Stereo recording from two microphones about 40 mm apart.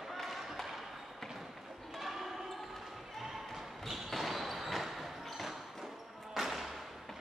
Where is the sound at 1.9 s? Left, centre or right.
Centre.